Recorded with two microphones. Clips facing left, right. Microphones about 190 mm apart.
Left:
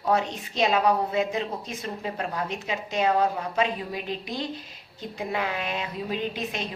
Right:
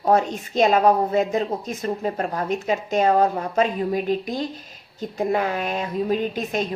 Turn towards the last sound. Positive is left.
turn(degrees=-45)  # may be behind; listen again after turning